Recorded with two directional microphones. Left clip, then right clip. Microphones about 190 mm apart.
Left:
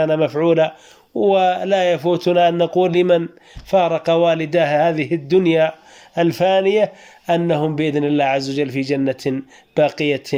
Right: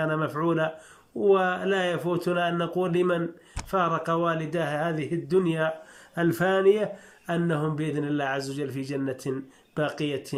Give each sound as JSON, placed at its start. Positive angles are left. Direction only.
{"t": 0.0, "sound": "speech", "side_deg": 20}